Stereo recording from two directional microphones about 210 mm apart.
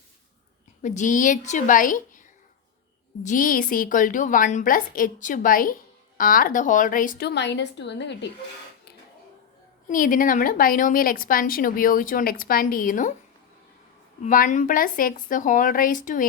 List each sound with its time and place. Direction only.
0.8 s a woman's voice: 35° left (ahead or behind)
3.2 s a woman's voice: 40° left (ahead or behind); by 8.3 s 55° left (ahead or behind)
9.9 s a woman's voice: 40° left (ahead or behind)
14.3 s a woman's voice: 40° left (ahead or behind)